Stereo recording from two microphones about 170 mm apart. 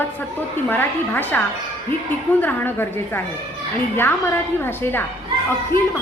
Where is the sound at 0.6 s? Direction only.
10° left (ahead or behind).